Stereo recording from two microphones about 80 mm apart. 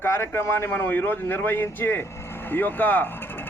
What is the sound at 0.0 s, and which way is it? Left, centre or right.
Speech, left.